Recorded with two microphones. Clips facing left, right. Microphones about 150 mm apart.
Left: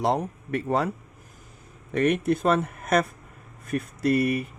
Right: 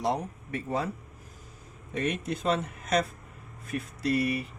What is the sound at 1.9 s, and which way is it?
Speech, 65° left (ahead or behind).